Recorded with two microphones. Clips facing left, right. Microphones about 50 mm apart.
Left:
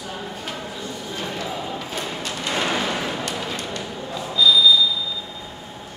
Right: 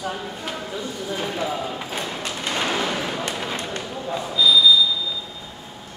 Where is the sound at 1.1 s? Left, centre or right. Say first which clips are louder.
Right 4 dB; centre.